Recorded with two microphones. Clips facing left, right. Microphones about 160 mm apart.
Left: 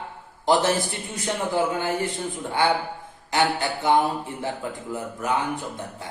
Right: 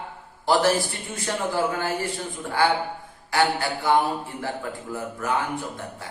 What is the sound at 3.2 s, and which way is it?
A man's voice, 20° left (ahead or behind).